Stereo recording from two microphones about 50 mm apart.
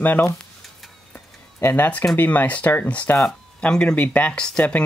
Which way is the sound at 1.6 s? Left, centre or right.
Left.